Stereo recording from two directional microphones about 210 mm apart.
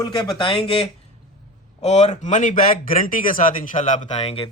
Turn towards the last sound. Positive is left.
turn(degrees=30)  # may be behind; listen again after turning